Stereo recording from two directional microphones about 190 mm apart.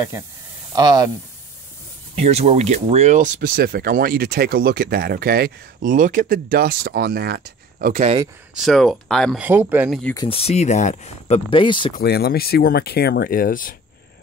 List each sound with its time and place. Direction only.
0.7 s speech: 20° right (ahead or behind)
2.1 s speech: 35° right (ahead or behind)
3.3 s speech: 50° right (ahead or behind)
7.9 s speech: 35° right (ahead or behind)
8.5 s speech: centre (ahead or behind)
9.4 s speech: 10° right (ahead or behind)
10.1 s speech: 30° left (ahead or behind)
12.0 s speech: 55° left (ahead or behind)